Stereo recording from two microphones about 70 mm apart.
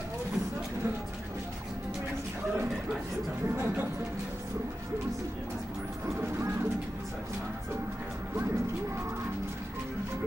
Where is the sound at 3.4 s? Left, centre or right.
Right.